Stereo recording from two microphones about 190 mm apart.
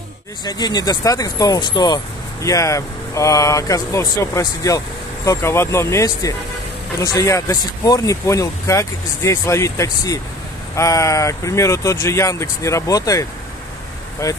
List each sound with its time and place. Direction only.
0.5 s speech: 20° left (ahead or behind)